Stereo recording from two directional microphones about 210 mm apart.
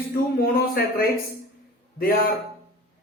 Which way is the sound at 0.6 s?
45° left (ahead or behind).